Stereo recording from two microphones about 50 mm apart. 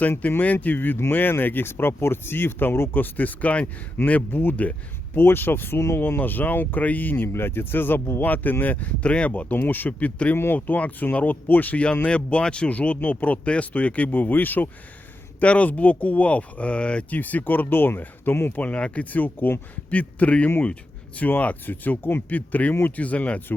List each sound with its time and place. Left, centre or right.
0.2 s speech: left
3.0 s speech: left
8.3 s speech: left
9.0 s speech: left
9.6 s speech: left
10.3 s speech: left
10.7 s speech: left
12.0 s speech: left
15.4 s speech: left
17.2 s speech: left
18.6 s speech: left
19.9 s speech: left